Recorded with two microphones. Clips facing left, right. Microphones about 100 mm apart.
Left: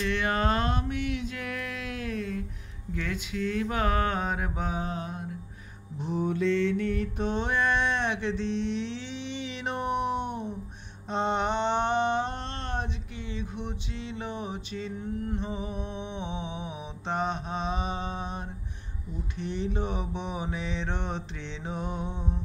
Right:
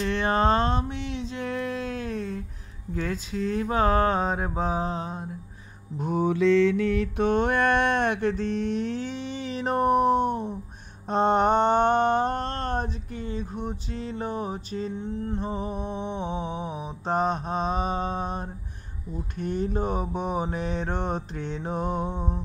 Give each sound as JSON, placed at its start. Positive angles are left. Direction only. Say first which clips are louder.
{"t": 0.0, "sound": "a sound", "louder": "right 4 dB", "side_deg": -35}
{"t": 2.9, "sound": "mantra", "louder": "right 3 dB", "side_deg": -35}
{"t": 6.1, "sound": "mantra", "louder": "right 6 dB", "side_deg": -90}
{"t": 15.0, "sound": "music", "louder": "right 2 dB", "side_deg": -30}
{"t": 15.4, "sound": "music", "louder": "right 4 dB", "side_deg": -45}
{"t": 19.3, "sound": "mantra", "louder": "right 4 dB", "side_deg": -45}